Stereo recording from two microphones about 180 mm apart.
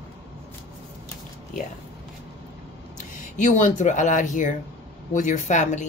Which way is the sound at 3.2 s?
45° left (ahead or behind).